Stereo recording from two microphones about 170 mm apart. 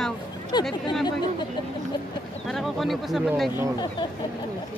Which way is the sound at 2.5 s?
Centre (ahead or behind).